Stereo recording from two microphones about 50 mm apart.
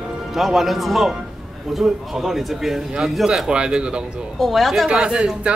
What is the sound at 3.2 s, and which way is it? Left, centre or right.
Speech, centre.